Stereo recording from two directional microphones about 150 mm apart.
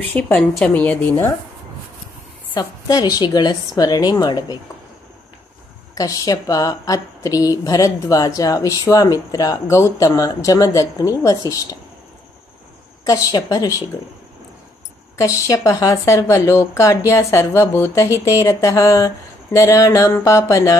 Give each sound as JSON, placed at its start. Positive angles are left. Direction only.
{"t": 0.1, "sound": "a woman's voice", "side_deg": 5}
{"t": 2.5, "sound": "a woman's voice", "side_deg": 25}
{"t": 5.9, "sound": "a woman's voice", "side_deg": 25}
{"t": 13.0, "sound": "a woman's voice", "side_deg": 20}
{"t": 15.1, "sound": "a woman's voice", "side_deg": 20}